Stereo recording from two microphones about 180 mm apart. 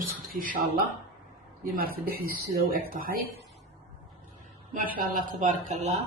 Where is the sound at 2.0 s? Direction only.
55° right (ahead or behind).